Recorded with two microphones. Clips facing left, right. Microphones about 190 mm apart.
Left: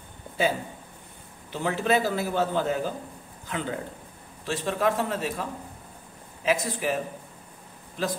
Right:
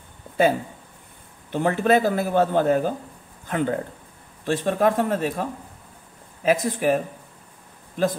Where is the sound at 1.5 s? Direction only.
55° right (ahead or behind).